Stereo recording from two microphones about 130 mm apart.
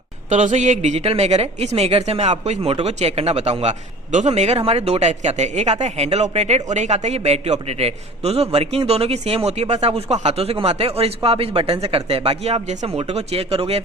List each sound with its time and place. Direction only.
0.3 s a man's voice: 70° right (ahead or behind); by 13.8 s 50° right (ahead or behind)